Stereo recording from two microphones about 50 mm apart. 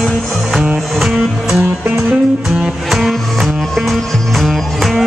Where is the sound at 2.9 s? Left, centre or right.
Centre.